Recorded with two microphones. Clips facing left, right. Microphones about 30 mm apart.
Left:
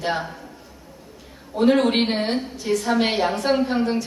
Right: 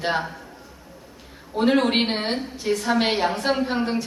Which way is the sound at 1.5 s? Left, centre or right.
Centre.